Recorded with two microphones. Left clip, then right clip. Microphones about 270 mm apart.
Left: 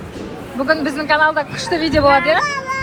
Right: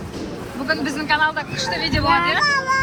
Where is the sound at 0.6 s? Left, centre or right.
Centre.